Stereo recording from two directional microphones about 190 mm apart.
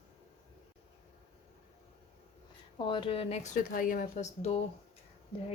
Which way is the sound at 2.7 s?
25° left (ahead or behind).